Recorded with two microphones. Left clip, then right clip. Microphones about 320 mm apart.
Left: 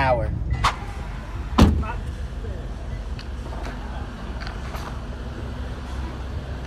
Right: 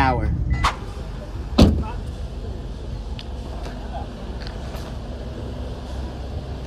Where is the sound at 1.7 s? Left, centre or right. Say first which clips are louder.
Right 1 dB; centre.